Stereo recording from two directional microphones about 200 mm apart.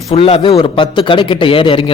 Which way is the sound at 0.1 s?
30° left (ahead or behind).